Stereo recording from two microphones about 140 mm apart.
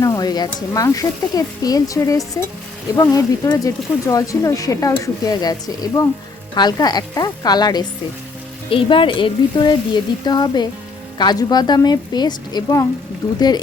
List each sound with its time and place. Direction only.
0.0 s speech: 25° left (ahead or behind)